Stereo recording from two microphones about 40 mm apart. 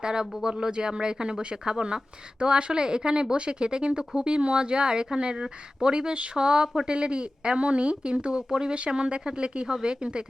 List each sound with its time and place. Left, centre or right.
0.0 s speech: centre